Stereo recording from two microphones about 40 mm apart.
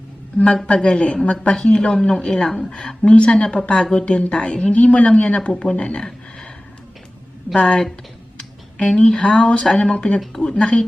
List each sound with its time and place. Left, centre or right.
0.5 s speech: left
7.5 s speech: left
8.8 s speech: left